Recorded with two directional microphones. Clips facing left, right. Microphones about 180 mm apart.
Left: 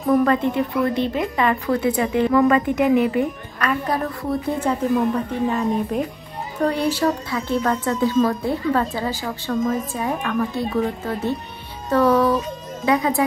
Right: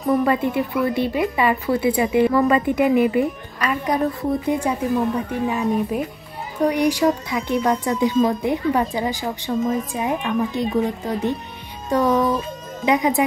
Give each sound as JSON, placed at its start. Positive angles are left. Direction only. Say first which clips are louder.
{"t": 0.0, "sound": "speech", "louder": "left 1 dB", "side_deg": -5}